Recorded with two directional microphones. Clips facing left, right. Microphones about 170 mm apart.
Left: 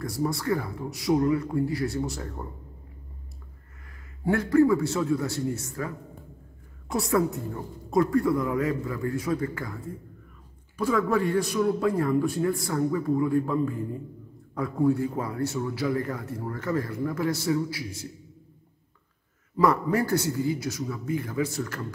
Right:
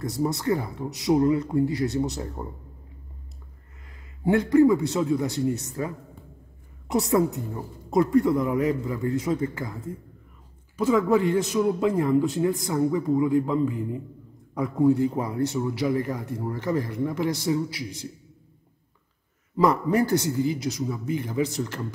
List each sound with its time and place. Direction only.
0.0 s a man's voice: 20° right (ahead or behind)
4.2 s a man's voice: 20° right (ahead or behind)
10.8 s a man's voice: 20° right (ahead or behind)
19.5 s a man's voice: 20° right (ahead or behind)